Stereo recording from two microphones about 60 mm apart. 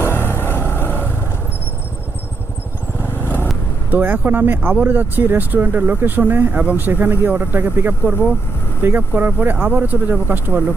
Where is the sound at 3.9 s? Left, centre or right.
Right.